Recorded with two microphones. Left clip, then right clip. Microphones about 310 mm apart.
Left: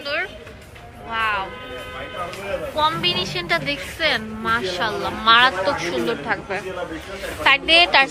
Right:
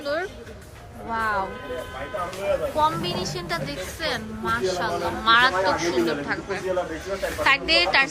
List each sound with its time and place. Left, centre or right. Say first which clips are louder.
0.0 s music: left 2 dB; centre
2.7 s a woman's voice: left 3 dB; centre